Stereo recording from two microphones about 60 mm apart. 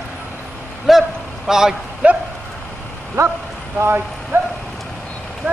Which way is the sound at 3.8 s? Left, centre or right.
Right.